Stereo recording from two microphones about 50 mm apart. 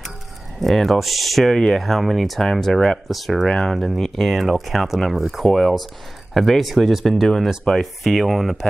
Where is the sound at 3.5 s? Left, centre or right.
Centre.